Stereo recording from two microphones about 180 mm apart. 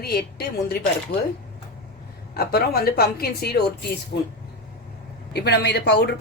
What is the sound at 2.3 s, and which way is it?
Speech, 55° left (ahead or behind).